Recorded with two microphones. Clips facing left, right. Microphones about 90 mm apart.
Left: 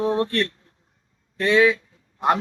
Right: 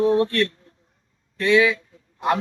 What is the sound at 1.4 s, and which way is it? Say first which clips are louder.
Speech: even; 40° left (ahead or behind).